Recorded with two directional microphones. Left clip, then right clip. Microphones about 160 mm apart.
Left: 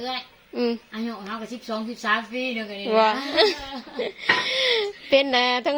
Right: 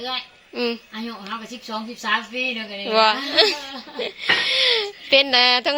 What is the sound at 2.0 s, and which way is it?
Speech, 15° left (ahead or behind).